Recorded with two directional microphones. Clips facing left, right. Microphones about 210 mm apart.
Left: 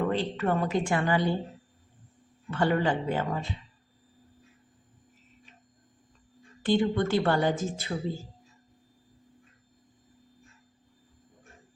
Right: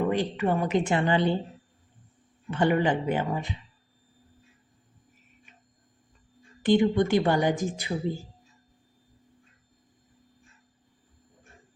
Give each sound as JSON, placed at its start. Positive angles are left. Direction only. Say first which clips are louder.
{"t": 0.0, "sound": "speech", "louder": "right 2 dB", "side_deg": -15}
{"t": 2.5, "sound": "speech", "louder": "right 2 dB", "side_deg": -15}
{"t": 6.6, "sound": "speech", "louder": "right 4 dB", "side_deg": -15}